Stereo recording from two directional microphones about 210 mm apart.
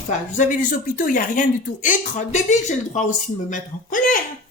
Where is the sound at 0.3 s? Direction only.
35° left (ahead or behind).